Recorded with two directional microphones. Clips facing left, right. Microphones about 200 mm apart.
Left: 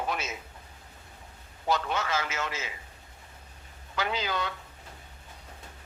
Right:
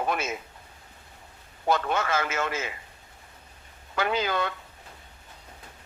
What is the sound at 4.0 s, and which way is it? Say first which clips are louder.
Speech: right 4 dB; 55° right (ahead or behind).